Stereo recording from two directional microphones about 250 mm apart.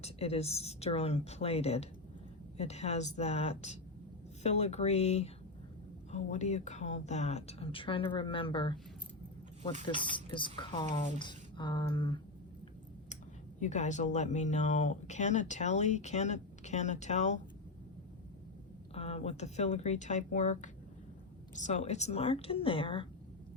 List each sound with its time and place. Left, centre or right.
0.0 s speech: left
9.8 s speech: centre
13.6 s speech: left
18.9 s speech: left